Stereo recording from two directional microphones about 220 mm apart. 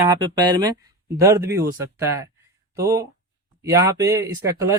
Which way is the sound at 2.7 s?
15° right (ahead or behind).